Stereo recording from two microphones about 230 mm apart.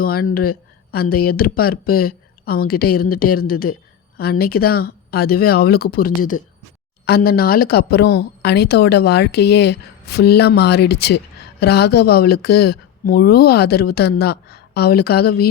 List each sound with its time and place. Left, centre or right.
0.0 s speech: left